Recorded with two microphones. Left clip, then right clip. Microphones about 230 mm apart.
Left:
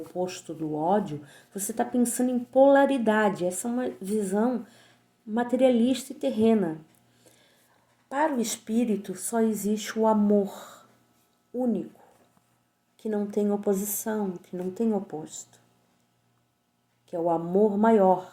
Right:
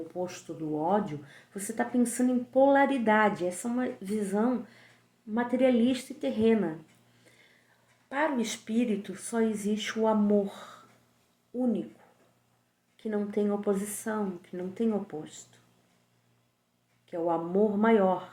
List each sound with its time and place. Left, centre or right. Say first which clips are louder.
0.1 s speech: left 4 dB; left
8.1 s speech: left 3 dB; left
13.0 s speech: left 3 dB; left
17.1 s speech: left 3 dB; left